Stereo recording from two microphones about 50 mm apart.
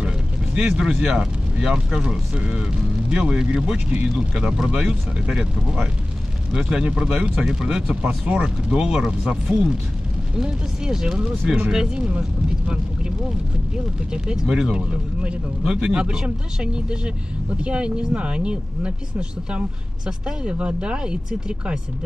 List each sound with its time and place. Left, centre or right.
0.6 s speech: centre
14.1 s speech: centre